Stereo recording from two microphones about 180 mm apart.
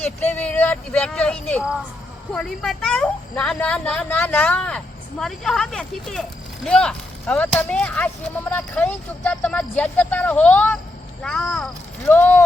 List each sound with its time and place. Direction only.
0.0 s a woman's voice: 10° left (ahead or behind)